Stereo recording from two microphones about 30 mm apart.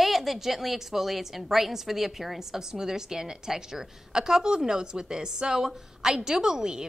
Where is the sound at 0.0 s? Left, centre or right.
Centre.